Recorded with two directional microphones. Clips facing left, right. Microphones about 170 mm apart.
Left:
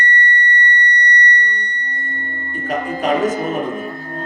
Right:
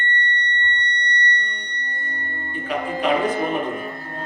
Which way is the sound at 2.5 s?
45° left (ahead or behind).